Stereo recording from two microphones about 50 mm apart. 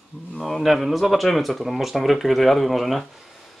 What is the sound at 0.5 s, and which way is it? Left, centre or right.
Speech, centre.